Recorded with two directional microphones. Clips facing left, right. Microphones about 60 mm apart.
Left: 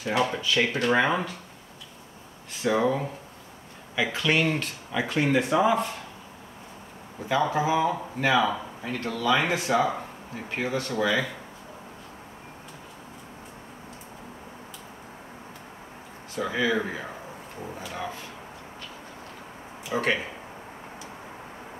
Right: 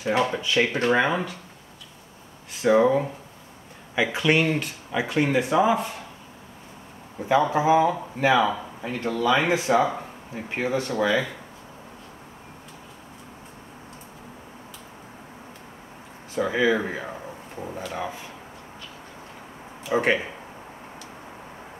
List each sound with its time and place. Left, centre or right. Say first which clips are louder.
0.4 s speech: right 2 dB; centre
1.0 s speech: right 1 dB; centre
2.6 s speech: right 5 dB; centre
7.2 s a man's voice: right 4 dB; centre
9.0 s speech: right 3 dB; right
9.8 s a sound: right 2 dB; centre
10.5 s speech: right 3 dB; centre
16.3 s speech: right 4 dB; centre
19.9 s speech: right 4 dB; centre